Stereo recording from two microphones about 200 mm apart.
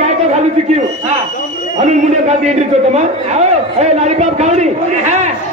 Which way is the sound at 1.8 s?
35° right (ahead or behind).